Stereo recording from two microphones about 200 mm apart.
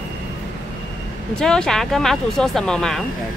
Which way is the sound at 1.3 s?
5° left (ahead or behind).